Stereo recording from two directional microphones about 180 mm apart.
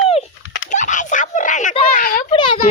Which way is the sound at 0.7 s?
40° left (ahead or behind).